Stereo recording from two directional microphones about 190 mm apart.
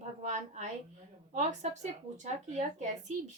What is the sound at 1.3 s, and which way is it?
A woman's voice, 40° right (ahead or behind).